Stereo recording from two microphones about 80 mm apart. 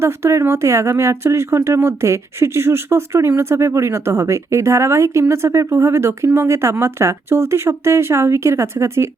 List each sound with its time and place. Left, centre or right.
0.0 s speech: right